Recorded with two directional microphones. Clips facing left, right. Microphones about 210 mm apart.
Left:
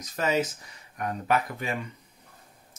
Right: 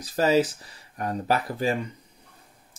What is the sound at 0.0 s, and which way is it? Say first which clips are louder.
Speech: right 5 dB; 35° right (ahead or behind).